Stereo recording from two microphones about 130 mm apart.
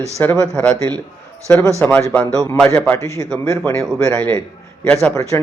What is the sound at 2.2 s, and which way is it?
Speech, 25° right (ahead or behind).